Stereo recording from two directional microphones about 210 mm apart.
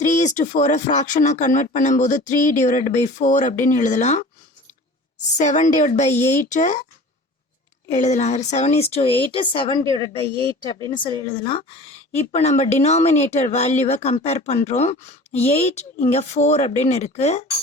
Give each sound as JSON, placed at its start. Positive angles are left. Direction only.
{"t": 0.0, "sound": "speech", "side_deg": 35}
{"t": 5.4, "sound": "speech", "side_deg": 35}
{"t": 7.9, "sound": "speech", "side_deg": 35}